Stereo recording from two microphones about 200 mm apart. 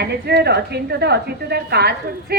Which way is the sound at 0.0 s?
55° right (ahead or behind).